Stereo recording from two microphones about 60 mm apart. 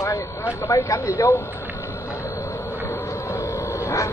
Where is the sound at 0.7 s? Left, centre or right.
Left.